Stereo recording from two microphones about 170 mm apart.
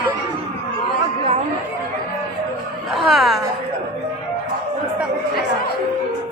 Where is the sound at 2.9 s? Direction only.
Centre (ahead or behind).